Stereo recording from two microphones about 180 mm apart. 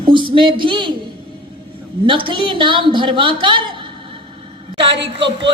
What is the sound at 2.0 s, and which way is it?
A woman's voice, 30° right (ahead or behind).